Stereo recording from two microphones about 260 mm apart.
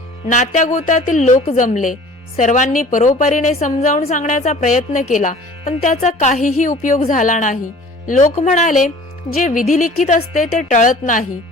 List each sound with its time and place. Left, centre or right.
0.3 s a woman's voice: left